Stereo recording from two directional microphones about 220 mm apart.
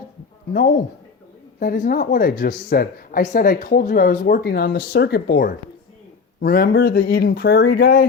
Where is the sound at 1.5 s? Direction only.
40° left (ahead or behind).